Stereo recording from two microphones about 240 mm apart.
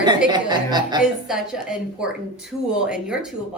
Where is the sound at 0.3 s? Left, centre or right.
Centre.